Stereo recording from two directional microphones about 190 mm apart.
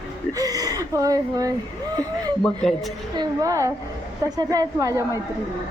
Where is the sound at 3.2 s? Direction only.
15° right (ahead or behind).